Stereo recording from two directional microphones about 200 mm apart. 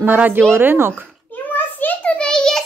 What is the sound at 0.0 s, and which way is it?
A child's voice, 10° right (ahead or behind).